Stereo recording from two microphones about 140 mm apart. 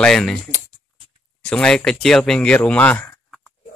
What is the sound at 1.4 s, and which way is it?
Speech, 5° left (ahead or behind).